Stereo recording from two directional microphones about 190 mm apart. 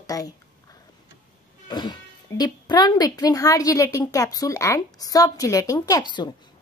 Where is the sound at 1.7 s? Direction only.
25° left (ahead or behind).